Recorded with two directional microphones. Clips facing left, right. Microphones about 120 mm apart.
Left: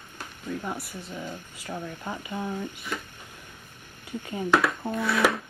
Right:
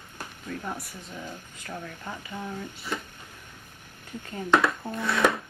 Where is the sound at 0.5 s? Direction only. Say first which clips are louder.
Left 3 dB; 5° left (ahead or behind).